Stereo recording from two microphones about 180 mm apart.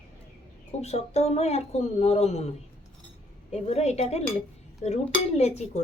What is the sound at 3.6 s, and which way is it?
Speech, 35° left (ahead or behind).